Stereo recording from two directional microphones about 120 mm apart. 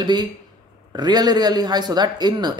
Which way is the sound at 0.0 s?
35° right (ahead or behind).